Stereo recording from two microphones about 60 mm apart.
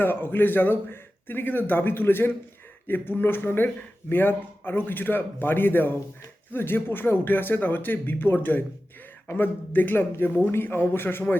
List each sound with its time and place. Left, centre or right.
0.0 s speech: left